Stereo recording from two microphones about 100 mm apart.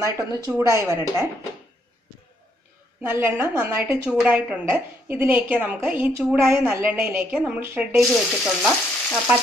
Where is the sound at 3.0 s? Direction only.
20° right (ahead or behind).